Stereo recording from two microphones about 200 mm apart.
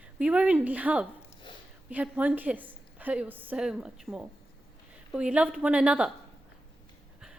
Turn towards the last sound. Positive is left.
turn(degrees=-5)  # may be behind; listen again after turning